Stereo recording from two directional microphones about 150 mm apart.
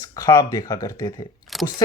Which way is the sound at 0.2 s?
25° left (ahead or behind).